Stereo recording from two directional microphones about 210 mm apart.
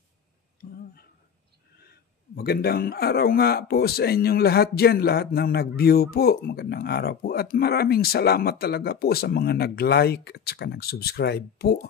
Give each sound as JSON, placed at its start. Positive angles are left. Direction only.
{"t": 2.3, "sound": "speech", "side_deg": 50}